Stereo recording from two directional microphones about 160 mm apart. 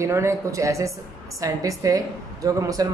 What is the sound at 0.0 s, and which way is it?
A woman's voice, 15° right (ahead or behind).